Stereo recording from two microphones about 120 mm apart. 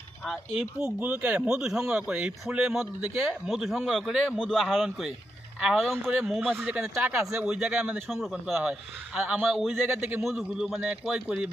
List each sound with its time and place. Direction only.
0.3 s a man's voice: 5° right (ahead or behind); by 7.4 s 20° right (ahead or behind)
7.4 s speech: 5° right (ahead or behind)
9.2 s speech: 15° right (ahead or behind)
9.5 s speech: centre (ahead or behind)
9.8 s a man's voice: 20° right (ahead or behind)
10.2 s speech: centre (ahead or behind)